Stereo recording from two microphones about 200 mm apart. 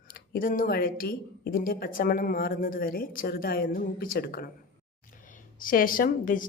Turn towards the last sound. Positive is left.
turn(degrees=40)  # may be behind; listen again after turning